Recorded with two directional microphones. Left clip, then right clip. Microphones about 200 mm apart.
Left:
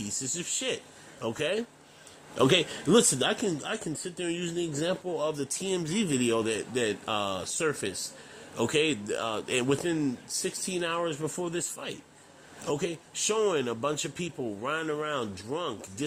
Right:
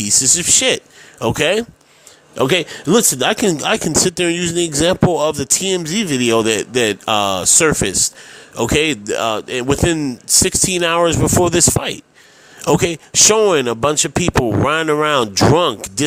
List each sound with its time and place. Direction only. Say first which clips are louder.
0.0 s speech: right 19 dB; 35° right (ahead or behind)